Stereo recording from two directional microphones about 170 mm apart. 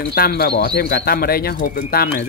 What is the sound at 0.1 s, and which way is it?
Speech, 65° left (ahead or behind).